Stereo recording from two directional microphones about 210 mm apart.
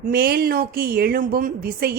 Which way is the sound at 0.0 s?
45° right (ahead or behind).